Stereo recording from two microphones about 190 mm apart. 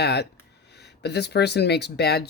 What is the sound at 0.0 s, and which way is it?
Speech, 60° left (ahead or behind).